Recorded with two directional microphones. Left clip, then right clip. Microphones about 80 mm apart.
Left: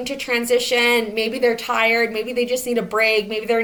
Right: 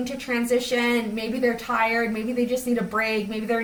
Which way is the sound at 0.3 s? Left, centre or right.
Left.